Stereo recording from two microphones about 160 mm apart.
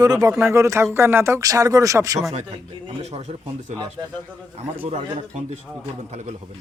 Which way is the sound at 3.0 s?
40° right (ahead or behind).